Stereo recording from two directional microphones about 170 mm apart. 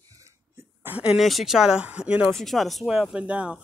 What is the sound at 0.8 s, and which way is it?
Speech, 10° right (ahead or behind).